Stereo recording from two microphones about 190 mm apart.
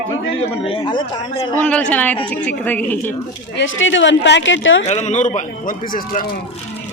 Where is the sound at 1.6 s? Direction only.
5° left (ahead or behind).